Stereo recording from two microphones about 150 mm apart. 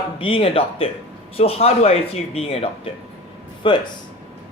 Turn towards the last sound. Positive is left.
turn(degrees=35)  # may be behind; listen again after turning